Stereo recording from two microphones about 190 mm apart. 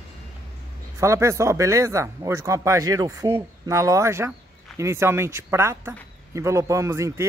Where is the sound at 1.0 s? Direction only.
15° right (ahead or behind).